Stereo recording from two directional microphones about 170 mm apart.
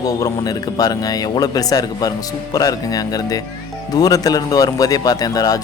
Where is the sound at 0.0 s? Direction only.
20° left (ahead or behind).